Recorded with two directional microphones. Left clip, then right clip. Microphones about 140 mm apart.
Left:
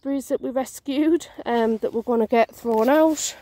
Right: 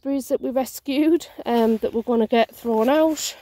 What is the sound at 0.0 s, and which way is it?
Speech, centre (ahead or behind).